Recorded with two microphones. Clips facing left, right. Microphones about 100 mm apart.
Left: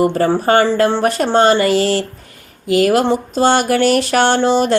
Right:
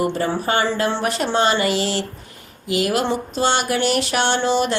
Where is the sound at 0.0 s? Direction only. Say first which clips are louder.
Left 7 dB; 45° left (ahead or behind).